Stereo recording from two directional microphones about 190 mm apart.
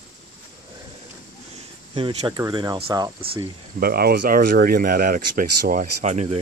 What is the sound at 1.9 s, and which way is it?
Speech, 25° right (ahead or behind).